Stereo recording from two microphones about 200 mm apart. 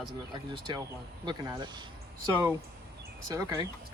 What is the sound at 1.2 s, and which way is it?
Speech, 20° right (ahead or behind).